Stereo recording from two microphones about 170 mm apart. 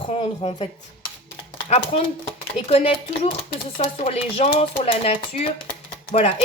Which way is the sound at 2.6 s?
35° left (ahead or behind).